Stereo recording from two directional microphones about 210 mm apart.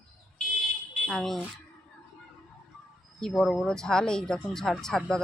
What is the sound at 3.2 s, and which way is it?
Speech, 5° left (ahead or behind).